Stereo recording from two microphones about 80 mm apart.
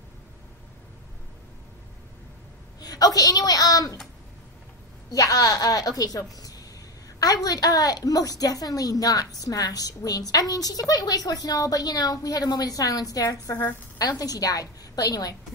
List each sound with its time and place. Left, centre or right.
2.8 s a sound: left
3.2 s a woman's voice: left
5.1 s a woman's voice: left